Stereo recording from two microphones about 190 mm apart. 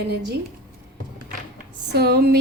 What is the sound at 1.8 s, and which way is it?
Speech, 60° right (ahead or behind).